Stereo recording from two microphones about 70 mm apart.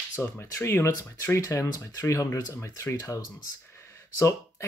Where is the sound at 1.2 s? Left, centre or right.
Left.